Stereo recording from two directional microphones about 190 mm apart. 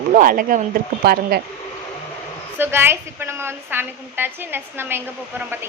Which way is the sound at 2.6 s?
10° right (ahead or behind).